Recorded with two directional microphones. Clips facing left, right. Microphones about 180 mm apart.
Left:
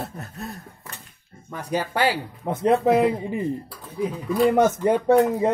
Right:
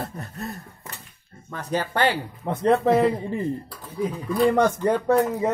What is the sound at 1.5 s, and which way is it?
Speech, 10° left (ahead or behind).